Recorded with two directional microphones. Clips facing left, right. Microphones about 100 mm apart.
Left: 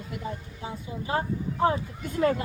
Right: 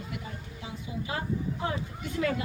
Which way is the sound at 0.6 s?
35° left (ahead or behind).